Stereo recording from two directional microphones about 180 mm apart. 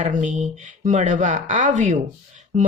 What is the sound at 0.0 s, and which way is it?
Speech, 45° right (ahead or behind).